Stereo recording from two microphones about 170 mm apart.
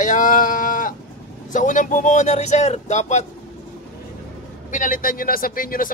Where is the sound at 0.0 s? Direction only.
50° left (ahead or behind).